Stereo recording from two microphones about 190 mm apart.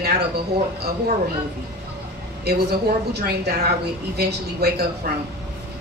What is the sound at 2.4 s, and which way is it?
A woman's voice, 60° right (ahead or behind).